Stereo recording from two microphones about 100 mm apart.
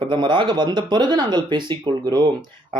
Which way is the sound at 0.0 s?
55° right (ahead or behind).